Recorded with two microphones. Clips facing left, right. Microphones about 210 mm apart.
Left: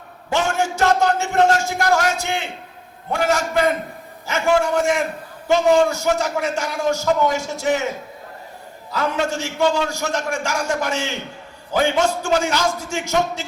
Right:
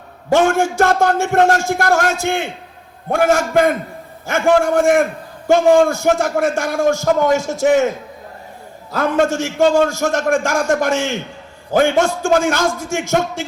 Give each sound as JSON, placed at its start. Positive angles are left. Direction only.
{"t": 0.3, "sound": "a man's voice", "side_deg": -50}
{"t": 8.9, "sound": "a man's voice", "side_deg": -50}